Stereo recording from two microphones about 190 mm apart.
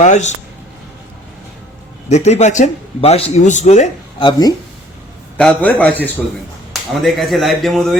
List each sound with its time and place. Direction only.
0.0 s a man's voice: 40° left (ahead or behind)
2.0 s a man's voice: 35° left (ahead or behind)
4.2 s speech: 20° left (ahead or behind)
5.4 s a man's voice: 5° left (ahead or behind)